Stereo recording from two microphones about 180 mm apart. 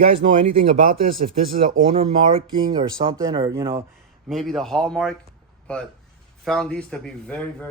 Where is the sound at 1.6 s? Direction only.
35° right (ahead or behind); by 3.9 s 15° right (ahead or behind).